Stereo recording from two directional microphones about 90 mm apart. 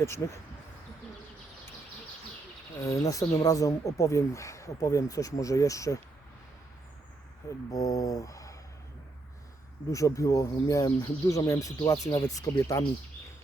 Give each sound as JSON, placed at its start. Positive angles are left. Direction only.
{"t": 0.0, "sound": "speech", "side_deg": 30}
{"t": 2.8, "sound": "speech", "side_deg": 40}
{"t": 7.7, "sound": "speech", "side_deg": 40}
{"t": 9.9, "sound": "speech", "side_deg": 35}